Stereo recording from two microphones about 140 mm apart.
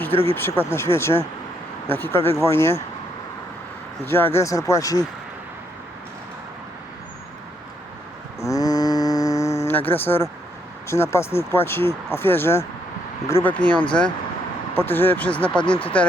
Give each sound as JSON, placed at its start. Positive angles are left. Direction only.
{"t": 0.1, "sound": "speech", "side_deg": 45}
{"t": 0.3, "sound": "speech", "side_deg": 15}
{"t": 4.0, "sound": "speech", "side_deg": 15}
{"t": 8.4, "sound": "a sound", "side_deg": 25}
{"t": 10.8, "sound": "speech", "side_deg": 20}
{"t": 14.7, "sound": "speech", "side_deg": 15}
{"t": 15.6, "sound": "speech", "side_deg": 40}